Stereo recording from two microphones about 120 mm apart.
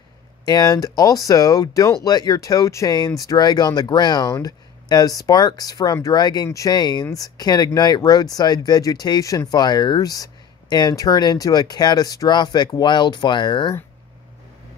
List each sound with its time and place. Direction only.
0.5 s speech: 35° left (ahead or behind)